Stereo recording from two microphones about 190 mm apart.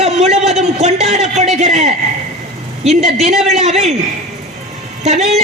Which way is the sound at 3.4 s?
35° right (ahead or behind).